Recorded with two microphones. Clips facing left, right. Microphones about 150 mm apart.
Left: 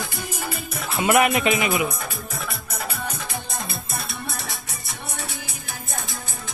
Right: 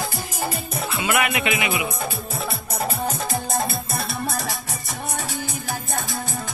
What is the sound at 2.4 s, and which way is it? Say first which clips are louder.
Music: right 5 dB; 35° right (ahead or behind).